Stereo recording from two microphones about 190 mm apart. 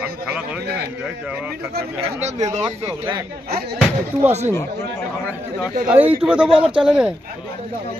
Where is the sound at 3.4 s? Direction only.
55° right (ahead or behind).